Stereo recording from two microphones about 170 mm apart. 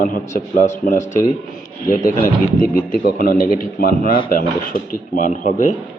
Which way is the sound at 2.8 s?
55° left (ahead or behind).